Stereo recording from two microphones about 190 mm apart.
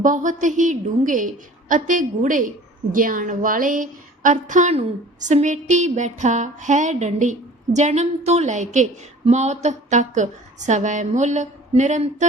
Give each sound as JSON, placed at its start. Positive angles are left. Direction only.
{"t": 0.0, "sound": "a woman's voice", "side_deg": -40}